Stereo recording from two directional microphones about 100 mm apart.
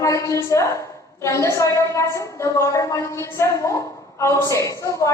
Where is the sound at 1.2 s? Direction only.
30° left (ahead or behind).